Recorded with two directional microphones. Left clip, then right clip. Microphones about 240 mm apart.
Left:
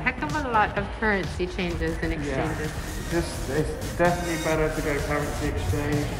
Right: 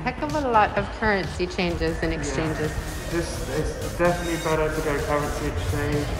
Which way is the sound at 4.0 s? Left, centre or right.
Centre.